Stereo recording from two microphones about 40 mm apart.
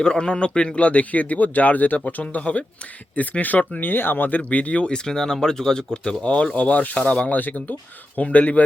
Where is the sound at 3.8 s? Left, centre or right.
Left.